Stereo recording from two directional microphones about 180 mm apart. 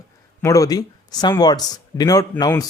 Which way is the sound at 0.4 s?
20° left (ahead or behind).